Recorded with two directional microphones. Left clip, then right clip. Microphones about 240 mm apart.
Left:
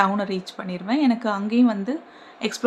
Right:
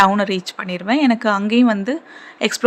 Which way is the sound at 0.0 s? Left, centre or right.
Right.